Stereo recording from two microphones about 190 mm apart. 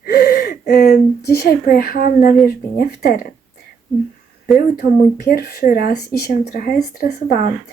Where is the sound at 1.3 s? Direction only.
55° left (ahead or behind).